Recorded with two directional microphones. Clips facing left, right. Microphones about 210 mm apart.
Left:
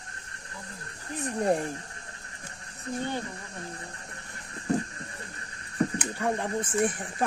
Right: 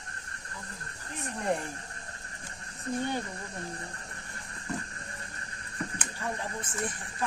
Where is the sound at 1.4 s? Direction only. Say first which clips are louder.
Left 5 dB; 40° left (ahead or behind).